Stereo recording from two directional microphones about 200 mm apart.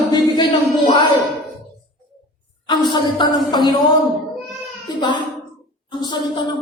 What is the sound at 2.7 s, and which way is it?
Speech, 20° left (ahead or behind).